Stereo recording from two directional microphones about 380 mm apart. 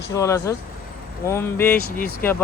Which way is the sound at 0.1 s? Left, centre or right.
Centre.